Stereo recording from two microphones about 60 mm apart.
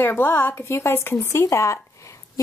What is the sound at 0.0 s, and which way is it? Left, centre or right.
A woman's voice, left.